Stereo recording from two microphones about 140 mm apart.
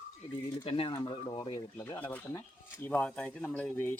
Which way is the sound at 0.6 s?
40° left (ahead or behind).